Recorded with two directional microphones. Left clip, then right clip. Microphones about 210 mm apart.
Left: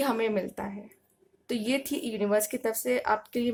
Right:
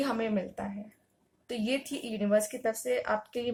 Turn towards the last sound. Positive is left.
turn(degrees=45)  # may be behind; listen again after turning